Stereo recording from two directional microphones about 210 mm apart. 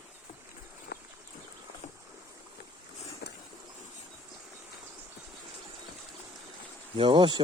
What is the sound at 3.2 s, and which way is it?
Vehicle, 50° left (ahead or behind).